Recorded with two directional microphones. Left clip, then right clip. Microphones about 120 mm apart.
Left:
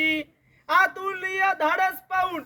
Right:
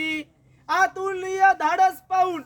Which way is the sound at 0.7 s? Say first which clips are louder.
Left 1 dB; 45° right (ahead or behind).